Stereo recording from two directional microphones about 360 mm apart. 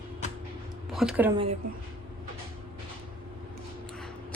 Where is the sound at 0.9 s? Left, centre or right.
Centre.